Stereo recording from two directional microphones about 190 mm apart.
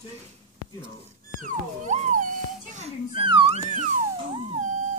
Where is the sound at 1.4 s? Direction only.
40° right (ahead or behind).